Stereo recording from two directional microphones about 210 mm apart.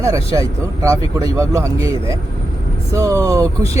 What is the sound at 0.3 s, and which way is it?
Speech, 15° right (ahead or behind).